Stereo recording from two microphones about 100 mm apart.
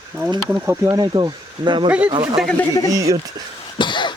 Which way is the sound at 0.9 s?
40° right (ahead or behind).